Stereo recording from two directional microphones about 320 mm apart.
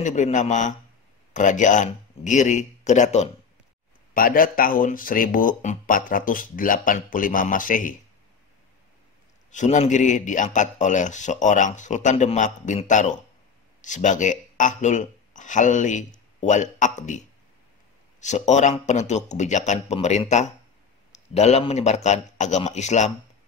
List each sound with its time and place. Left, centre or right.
0.0 s speech: left
9.5 s speech: left
18.2 s speech: left